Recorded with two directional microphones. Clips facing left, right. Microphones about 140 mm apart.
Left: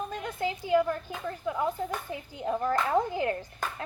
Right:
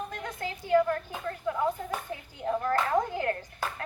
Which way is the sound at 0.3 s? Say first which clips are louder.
Right 1 dB; 15° left (ahead or behind).